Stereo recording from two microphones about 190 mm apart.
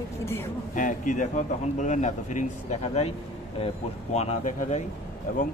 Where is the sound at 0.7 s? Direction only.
45° left (ahead or behind).